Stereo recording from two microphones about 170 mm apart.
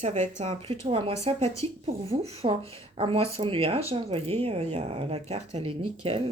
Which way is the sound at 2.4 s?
40° right (ahead or behind).